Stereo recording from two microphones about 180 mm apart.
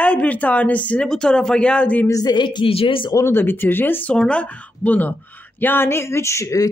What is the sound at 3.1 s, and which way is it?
Speech, 15° left (ahead or behind).